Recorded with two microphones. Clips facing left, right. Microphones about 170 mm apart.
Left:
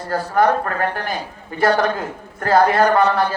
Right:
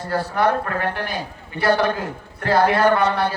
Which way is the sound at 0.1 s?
45° left (ahead or behind).